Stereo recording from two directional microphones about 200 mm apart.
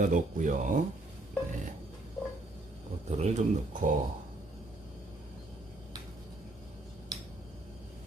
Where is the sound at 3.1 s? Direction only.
35° right (ahead or behind).